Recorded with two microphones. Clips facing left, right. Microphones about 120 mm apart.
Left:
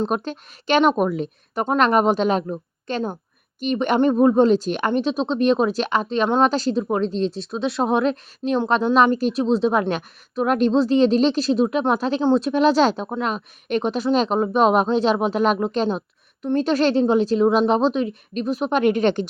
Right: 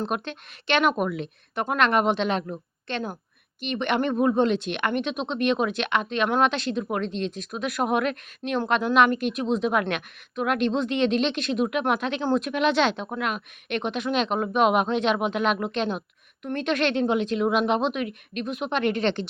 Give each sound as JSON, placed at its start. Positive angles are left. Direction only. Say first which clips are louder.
{"t": 0.1, "sound": "speech", "louder": "left 5 dB", "side_deg": 40}
{"t": 3.6, "sound": "a woman's voice", "louder": "left 6 dB", "side_deg": 40}